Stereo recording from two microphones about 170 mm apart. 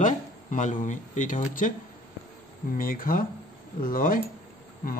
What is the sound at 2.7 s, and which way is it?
Speech, 55° left (ahead or behind).